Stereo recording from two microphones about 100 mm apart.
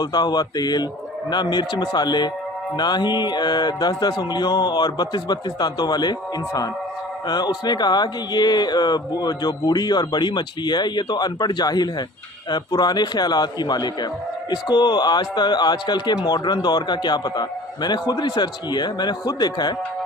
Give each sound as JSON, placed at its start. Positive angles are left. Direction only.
{"t": 0.0, "sound": "speech", "side_deg": 45}
{"t": 7.3, "sound": "speech", "side_deg": 45}